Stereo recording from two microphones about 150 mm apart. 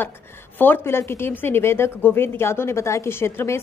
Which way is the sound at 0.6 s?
15° left (ahead or behind).